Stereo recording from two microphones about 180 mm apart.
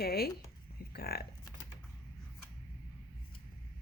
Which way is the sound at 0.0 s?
55° left (ahead or behind).